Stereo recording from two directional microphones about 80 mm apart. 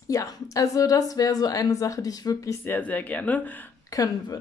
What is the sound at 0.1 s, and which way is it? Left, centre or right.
A woman's voice, left.